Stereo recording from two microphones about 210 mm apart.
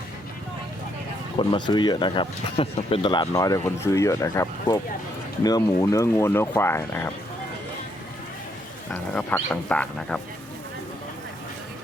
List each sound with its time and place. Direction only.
1.4 s speech: 20° left (ahead or behind)
8.9 s speech: 5° left (ahead or behind)